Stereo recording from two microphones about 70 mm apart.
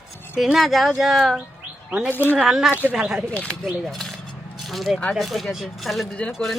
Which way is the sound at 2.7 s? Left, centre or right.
Right.